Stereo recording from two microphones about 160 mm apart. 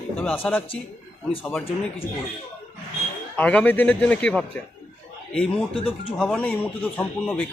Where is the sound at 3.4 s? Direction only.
10° left (ahead or behind).